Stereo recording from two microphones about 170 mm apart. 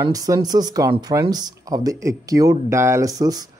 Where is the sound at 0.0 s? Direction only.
20° right (ahead or behind).